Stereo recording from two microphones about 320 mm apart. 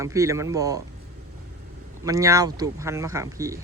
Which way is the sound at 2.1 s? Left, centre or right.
Centre.